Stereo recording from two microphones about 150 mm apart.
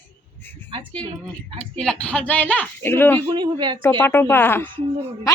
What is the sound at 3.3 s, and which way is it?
Speech, 35° right (ahead or behind).